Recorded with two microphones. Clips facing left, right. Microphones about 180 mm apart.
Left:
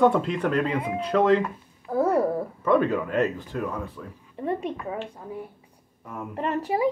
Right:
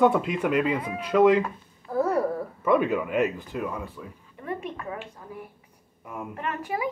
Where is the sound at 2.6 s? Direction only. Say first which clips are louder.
Left 1 dB; 10° right (ahead or behind).